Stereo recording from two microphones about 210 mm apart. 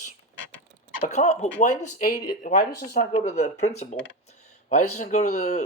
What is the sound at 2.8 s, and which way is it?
Speech, 50° left (ahead or behind).